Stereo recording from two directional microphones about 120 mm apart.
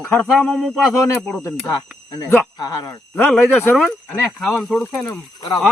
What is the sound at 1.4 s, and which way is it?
Speech, 20° left (ahead or behind).